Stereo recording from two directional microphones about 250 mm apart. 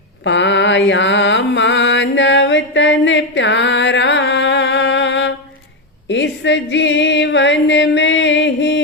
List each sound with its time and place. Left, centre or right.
0.3 s mantra: left
6.1 s music: left